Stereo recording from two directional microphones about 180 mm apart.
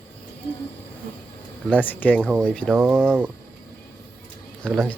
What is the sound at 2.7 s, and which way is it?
Speech, 5° right (ahead or behind).